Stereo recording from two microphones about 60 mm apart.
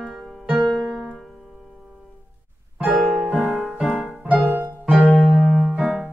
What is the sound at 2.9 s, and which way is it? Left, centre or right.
Music, centre.